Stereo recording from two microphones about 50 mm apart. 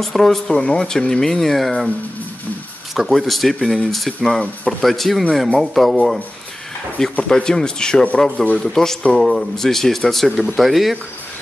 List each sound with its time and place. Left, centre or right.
0.0 s speech: centre
2.9 s speech: centre
7.2 s speech: centre